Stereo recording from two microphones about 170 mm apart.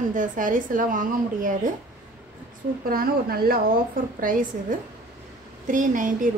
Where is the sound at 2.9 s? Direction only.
60° right (ahead or behind).